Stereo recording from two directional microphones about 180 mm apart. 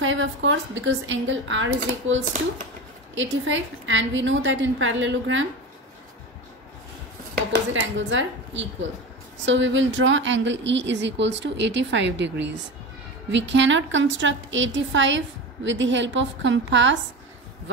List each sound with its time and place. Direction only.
0.0 s a woman's voice: 90° right
3.2 s a woman's voice: 90° right
7.7 s a woman's voice: 90° right